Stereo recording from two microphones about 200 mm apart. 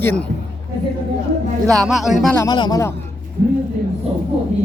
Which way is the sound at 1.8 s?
Centre (ahead or behind).